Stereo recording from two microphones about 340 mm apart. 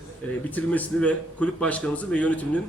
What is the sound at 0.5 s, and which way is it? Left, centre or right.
A man's voice, centre.